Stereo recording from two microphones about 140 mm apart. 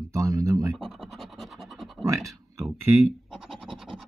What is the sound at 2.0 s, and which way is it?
Speech, 25° right (ahead or behind).